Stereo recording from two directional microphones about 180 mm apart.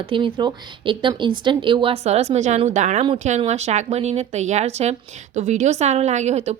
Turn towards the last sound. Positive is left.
turn(degrees=-40)  # may be behind; listen again after turning